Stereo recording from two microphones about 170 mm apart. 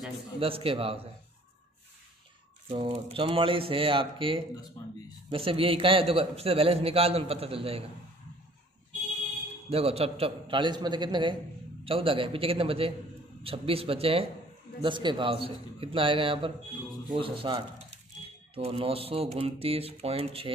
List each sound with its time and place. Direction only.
0.4 s a man's voice: 35° right (ahead or behind)
2.7 s a man's voice: 30° right (ahead or behind)
9.7 s a man's voice: 35° right (ahead or behind)